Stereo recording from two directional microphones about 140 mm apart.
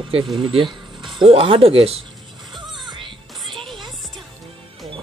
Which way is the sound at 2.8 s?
35° right (ahead or behind).